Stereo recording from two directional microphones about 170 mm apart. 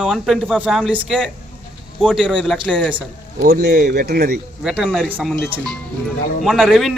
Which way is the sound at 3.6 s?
65° right (ahead or behind).